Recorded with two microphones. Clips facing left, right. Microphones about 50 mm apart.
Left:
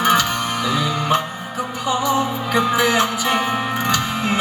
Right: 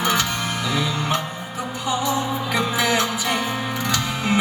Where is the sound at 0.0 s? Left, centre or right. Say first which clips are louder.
Left 5 dB; left.